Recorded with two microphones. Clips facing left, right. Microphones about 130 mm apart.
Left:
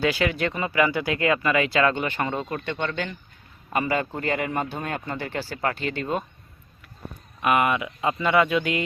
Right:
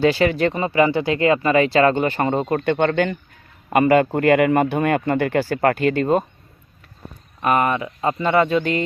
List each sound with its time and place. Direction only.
0.0 s a man's voice: 35° right (ahead or behind)
7.4 s speech: 35° right (ahead or behind)